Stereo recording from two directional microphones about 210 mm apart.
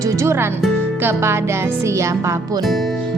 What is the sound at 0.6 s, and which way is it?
Music, 10° right (ahead or behind).